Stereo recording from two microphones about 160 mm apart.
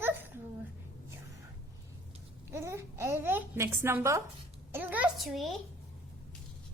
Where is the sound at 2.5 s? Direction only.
15° right (ahead or behind); by 5.5 s centre (ahead or behind).